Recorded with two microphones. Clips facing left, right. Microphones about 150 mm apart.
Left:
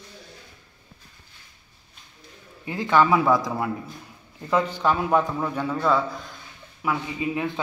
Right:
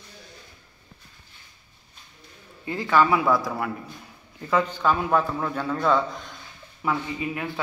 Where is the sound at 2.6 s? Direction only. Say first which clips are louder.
Left 1 dB; 15° left (ahead or behind).